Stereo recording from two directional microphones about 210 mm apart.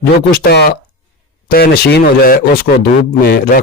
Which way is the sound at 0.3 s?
45° left (ahead or behind).